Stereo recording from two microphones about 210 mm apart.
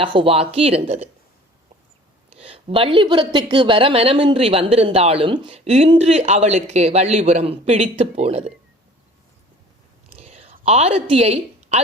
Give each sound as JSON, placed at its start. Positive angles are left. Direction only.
{"t": 0.0, "sound": "a woman's voice", "side_deg": -25}
{"t": 2.4, "sound": "a woman's voice", "side_deg": -25}
{"t": 10.2, "sound": "whispering", "side_deg": -30}
{"t": 10.7, "sound": "a woman's voice", "side_deg": -30}